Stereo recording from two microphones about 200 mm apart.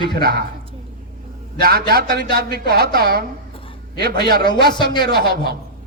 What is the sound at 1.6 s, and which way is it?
A woman's voice, 50° right (ahead or behind).